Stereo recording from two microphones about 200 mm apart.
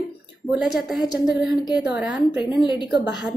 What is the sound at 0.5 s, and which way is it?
A woman's voice, centre (ahead or behind).